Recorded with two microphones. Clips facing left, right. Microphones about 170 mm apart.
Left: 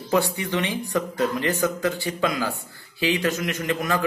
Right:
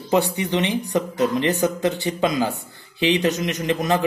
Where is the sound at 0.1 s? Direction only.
20° right (ahead or behind).